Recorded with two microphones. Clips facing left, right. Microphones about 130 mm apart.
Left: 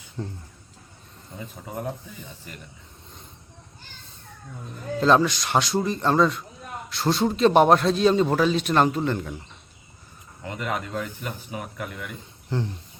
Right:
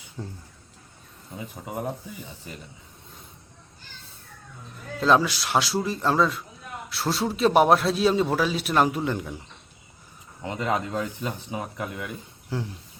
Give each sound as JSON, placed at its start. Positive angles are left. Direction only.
{"t": 0.2, "sound": "a man's voice", "side_deg": -5}
{"t": 1.4, "sound": "speech", "side_deg": -15}
{"t": 4.9, "sound": "a man's voice", "side_deg": -5}
{"t": 10.4, "sound": "speech", "side_deg": -20}
{"t": 12.5, "sound": "speech", "side_deg": -5}